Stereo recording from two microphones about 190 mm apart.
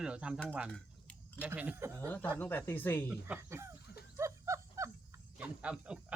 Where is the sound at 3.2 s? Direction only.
15° right (ahead or behind).